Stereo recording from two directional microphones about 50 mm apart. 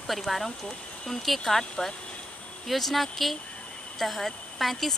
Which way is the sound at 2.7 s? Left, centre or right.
Centre.